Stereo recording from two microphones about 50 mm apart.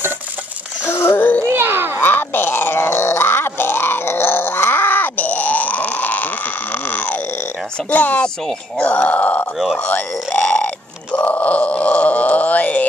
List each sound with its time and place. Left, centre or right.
0.8 s a sound: left
1.1 s music: left
1.5 s a sound: right
2.0 s grunt: left
7.9 s speech: left
10.4 s grunt: left